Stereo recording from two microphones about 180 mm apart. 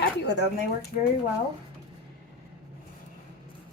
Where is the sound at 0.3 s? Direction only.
70° left (ahead or behind).